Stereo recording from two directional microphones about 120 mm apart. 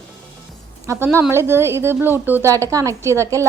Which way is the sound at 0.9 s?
20° right (ahead or behind).